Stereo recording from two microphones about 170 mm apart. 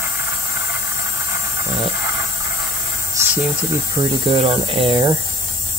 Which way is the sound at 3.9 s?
30° right (ahead or behind).